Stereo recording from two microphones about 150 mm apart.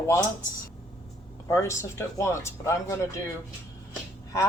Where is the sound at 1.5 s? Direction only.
20° left (ahead or behind).